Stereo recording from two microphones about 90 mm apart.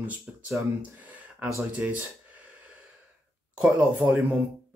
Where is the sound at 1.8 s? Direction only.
15° right (ahead or behind).